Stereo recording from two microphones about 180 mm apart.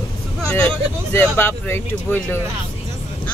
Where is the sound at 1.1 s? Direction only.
10° left (ahead or behind).